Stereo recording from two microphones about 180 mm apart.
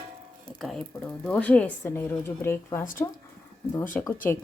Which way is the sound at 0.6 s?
Centre (ahead or behind).